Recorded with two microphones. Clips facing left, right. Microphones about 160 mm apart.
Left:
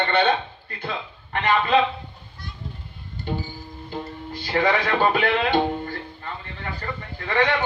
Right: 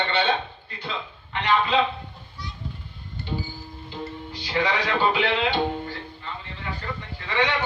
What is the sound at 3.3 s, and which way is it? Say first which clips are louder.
A man's voice: left 3 dB; 50° left (ahead or behind).